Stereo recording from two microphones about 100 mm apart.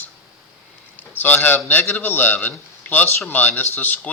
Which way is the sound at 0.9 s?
20° left (ahead or behind).